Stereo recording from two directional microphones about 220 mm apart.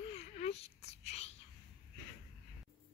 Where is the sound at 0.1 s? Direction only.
30° left (ahead or behind).